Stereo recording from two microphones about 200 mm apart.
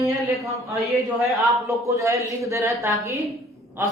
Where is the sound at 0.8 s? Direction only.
Centre (ahead or behind).